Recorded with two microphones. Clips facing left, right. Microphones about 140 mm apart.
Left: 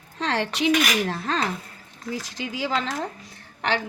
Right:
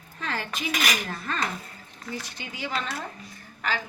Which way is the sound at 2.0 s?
90° left.